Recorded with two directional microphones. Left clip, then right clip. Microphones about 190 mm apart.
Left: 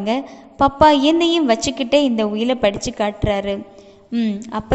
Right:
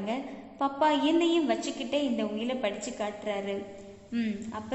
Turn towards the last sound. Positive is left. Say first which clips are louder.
# left 11 dB
turn(degrees=30)  # may be behind; listen again after turning